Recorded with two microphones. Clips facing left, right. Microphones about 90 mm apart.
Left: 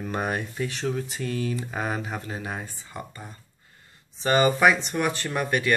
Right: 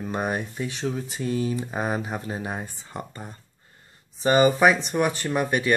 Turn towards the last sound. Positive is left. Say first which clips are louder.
# right 2 dB
turn(degrees=-20)  # may be behind; listen again after turning